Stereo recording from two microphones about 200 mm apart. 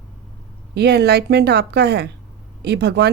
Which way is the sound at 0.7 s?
55° right (ahead or behind).